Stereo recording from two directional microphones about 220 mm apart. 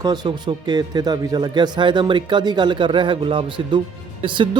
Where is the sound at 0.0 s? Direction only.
20° right (ahead or behind).